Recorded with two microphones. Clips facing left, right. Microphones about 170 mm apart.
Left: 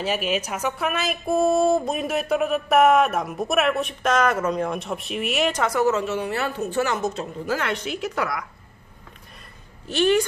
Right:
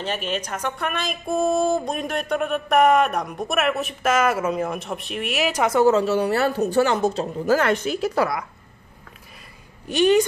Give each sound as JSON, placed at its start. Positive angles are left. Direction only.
{"t": 0.0, "sound": "speech", "side_deg": 5}
{"t": 5.6, "sound": "speech", "side_deg": -25}
{"t": 9.8, "sound": "a woman's voice", "side_deg": -15}